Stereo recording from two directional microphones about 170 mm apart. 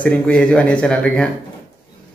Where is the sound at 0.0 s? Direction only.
5° left (ahead or behind).